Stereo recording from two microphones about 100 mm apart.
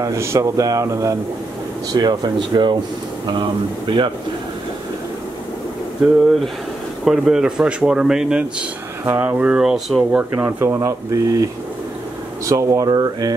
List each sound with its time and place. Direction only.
0.0 s speech: 30° right (ahead or behind)
1.9 s speech: 45° right (ahead or behind)
7.1 s speech: 5° right (ahead or behind)
9.0 s speech: 20° right (ahead or behind); by 10.0 s 5° right (ahead or behind)
10.1 s speech: 20° right (ahead or behind); by 13.3 s 40° right (ahead or behind)